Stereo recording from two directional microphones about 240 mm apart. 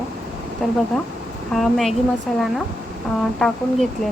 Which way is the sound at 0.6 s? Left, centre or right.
Centre.